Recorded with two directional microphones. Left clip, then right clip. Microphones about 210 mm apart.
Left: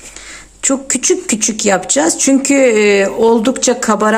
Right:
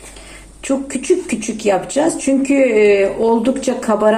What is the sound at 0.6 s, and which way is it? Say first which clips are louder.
Speech: left 4 dB; 45° left (ahead or behind).